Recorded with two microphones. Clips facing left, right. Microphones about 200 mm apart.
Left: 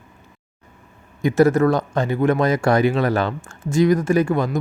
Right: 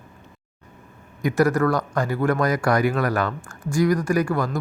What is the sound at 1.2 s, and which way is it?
Speech, 25° left (ahead or behind).